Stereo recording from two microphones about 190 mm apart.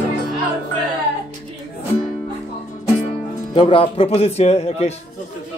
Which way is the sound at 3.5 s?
25° left (ahead or behind).